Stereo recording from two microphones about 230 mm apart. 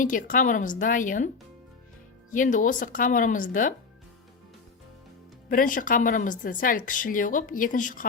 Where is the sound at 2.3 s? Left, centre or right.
Left.